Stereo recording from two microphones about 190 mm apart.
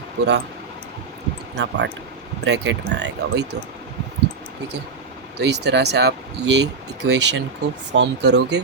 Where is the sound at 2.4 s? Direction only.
70° right (ahead or behind).